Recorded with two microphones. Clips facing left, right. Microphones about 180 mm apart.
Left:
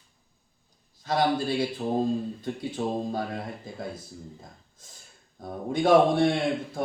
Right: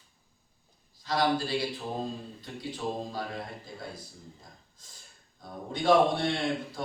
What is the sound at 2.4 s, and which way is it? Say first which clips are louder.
Speech: left 6 dB; 55° left (ahead or behind).